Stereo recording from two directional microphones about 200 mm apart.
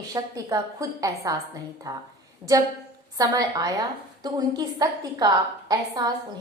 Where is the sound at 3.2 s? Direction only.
20° right (ahead or behind).